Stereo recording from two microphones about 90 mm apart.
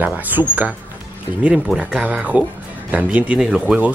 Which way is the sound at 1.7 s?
15° right (ahead or behind).